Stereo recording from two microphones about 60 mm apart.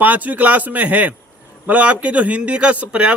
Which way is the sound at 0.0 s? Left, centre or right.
Right.